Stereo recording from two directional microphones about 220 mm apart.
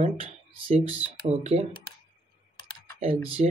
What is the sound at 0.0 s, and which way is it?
Speech, 30° right (ahead or behind).